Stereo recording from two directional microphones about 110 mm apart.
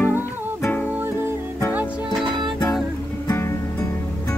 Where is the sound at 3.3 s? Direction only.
25° left (ahead or behind).